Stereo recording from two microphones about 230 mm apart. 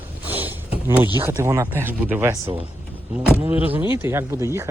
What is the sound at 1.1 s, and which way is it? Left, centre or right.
Speech, centre.